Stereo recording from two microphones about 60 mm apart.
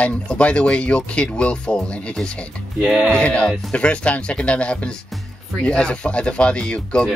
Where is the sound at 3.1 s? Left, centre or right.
Centre.